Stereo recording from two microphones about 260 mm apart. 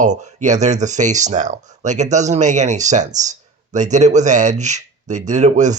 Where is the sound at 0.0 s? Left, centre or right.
Right.